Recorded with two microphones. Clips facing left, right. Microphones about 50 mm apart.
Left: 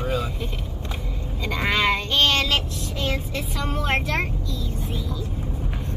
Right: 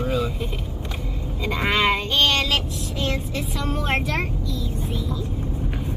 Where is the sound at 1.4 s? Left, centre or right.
Centre.